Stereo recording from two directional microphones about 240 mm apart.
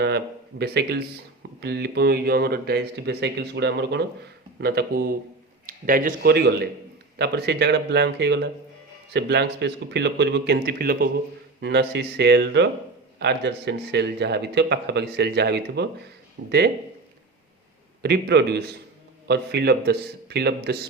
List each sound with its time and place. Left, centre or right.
0.6 s a man's voice: right
18.0 s speech: right